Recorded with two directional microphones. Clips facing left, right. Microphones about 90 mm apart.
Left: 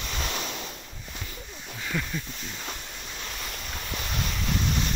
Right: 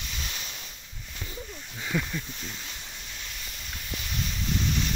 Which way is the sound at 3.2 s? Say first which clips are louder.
Left 5 dB; 55° left (ahead or behind).